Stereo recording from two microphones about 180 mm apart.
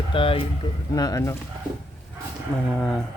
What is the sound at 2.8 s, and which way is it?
Speech, centre (ahead or behind).